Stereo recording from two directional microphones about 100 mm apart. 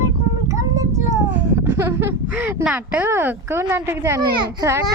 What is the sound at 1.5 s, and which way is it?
A woman's voice, 25° right (ahead or behind).